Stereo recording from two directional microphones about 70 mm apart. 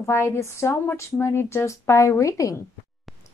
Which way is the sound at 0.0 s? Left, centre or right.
Left.